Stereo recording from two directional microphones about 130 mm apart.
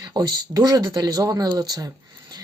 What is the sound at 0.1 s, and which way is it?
Speech, 30° right (ahead or behind).